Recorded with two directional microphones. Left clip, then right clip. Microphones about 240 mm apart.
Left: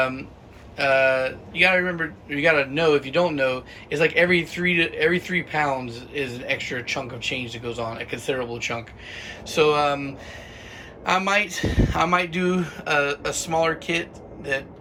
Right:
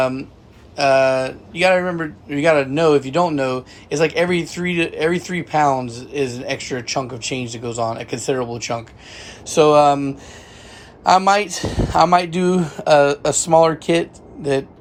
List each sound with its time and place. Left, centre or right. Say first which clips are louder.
0.8 s speech: right 4 dB; centre